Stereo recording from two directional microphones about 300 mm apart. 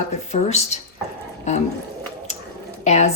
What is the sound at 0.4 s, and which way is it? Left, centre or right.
Speech, left.